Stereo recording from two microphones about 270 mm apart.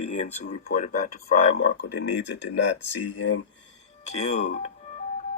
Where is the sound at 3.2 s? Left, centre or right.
Left.